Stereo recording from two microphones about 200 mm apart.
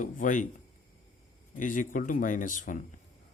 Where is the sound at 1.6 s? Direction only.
40° left (ahead or behind).